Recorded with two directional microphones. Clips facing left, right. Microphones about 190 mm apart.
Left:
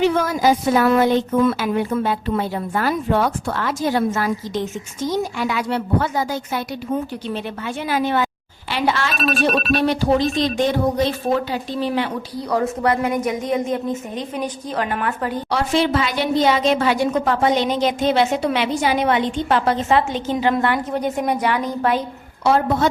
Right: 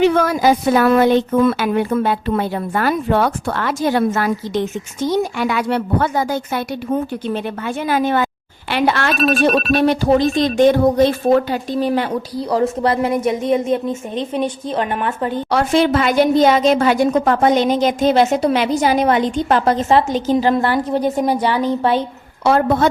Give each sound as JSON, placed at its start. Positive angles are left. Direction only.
{"t": 0.0, "sound": "a woman's voice", "side_deg": -65}
{"t": 9.1, "sound": "speech", "side_deg": 0}
{"t": 9.8, "sound": "a woman's voice", "side_deg": -50}
{"t": 12.4, "sound": "a woman's voice", "side_deg": -30}
{"t": 15.4, "sound": "a woman's voice", "side_deg": -50}
{"t": 22.4, "sound": "a woman's voice", "side_deg": -60}